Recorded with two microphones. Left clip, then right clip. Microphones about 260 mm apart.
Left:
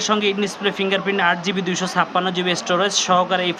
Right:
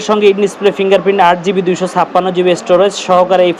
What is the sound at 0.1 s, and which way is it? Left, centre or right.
Speech, centre.